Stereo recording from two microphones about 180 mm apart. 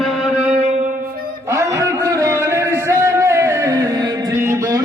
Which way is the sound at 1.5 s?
15° right (ahead or behind).